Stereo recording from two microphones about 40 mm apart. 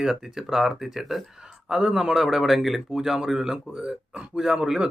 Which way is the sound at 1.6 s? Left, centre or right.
Centre.